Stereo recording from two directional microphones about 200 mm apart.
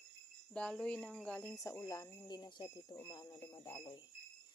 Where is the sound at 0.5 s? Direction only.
5° left (ahead or behind).